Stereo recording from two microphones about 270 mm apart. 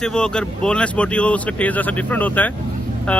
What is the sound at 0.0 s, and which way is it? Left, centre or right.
Speech, centre.